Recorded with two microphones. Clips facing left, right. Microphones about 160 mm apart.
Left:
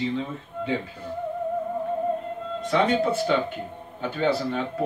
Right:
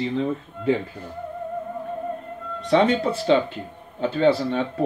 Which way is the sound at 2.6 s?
30° right (ahead or behind).